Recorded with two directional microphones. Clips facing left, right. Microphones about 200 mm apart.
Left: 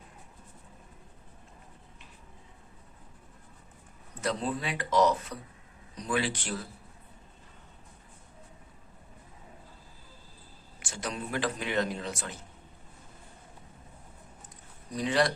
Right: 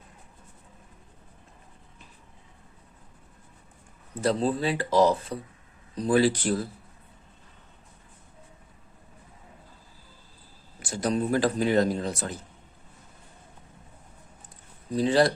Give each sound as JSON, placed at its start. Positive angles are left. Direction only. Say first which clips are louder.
{"t": 4.2, "sound": "speech", "louder": "right 7 dB", "side_deg": -30}
{"t": 10.8, "sound": "speech", "louder": "right 10 dB", "side_deg": -40}
{"t": 14.8, "sound": "speech", "louder": "right 6 dB", "side_deg": -30}